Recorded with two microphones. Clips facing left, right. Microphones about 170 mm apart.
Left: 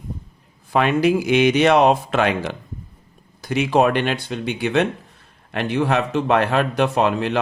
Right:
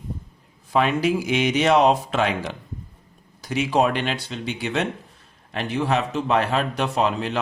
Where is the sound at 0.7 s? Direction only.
60° left (ahead or behind).